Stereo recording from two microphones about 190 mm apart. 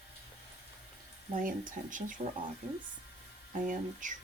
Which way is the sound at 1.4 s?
45° right (ahead or behind).